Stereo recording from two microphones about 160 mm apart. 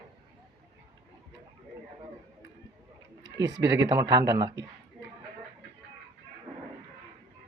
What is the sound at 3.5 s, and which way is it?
Speech, 90° right.